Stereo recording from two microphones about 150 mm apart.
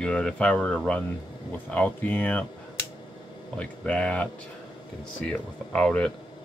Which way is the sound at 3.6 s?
10° left (ahead or behind).